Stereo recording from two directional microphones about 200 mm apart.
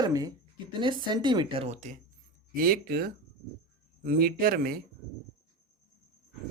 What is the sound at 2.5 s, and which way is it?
Speech, 45° right (ahead or behind).